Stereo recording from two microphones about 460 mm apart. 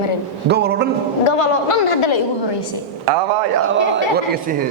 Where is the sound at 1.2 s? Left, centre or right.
Left.